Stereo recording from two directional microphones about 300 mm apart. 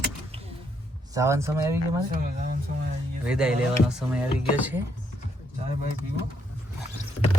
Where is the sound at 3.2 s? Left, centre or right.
Centre.